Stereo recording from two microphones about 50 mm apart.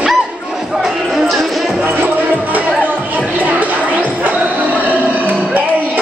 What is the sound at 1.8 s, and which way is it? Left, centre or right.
Music, right.